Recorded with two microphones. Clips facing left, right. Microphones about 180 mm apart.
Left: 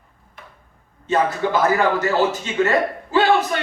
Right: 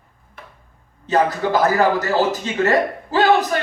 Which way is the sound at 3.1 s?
40° right (ahead or behind).